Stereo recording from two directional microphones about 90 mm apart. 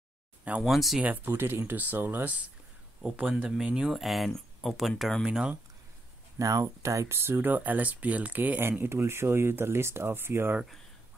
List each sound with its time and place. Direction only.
0.6 s speech: centre (ahead or behind)
1.0 s speech: 20° right (ahead or behind)
3.4 s speech: 10° right (ahead or behind)
6.3 s speech: 40° right (ahead or behind)